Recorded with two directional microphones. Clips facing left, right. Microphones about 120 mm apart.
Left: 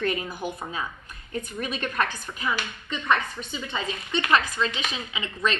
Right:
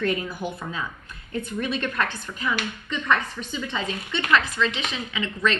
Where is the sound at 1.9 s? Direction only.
15° left (ahead or behind).